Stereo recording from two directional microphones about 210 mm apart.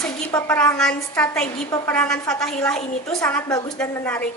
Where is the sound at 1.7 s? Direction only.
15° left (ahead or behind).